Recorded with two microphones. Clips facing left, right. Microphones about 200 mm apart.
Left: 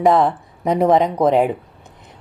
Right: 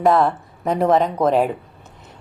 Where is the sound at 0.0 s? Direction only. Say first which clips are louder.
Left 1 dB; 15° left (ahead or behind).